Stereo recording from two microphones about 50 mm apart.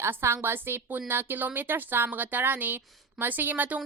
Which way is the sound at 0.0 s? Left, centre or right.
Right.